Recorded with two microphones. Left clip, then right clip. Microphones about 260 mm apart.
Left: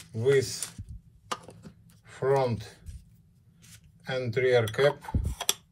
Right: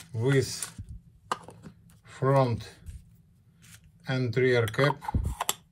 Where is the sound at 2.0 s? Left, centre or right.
Right.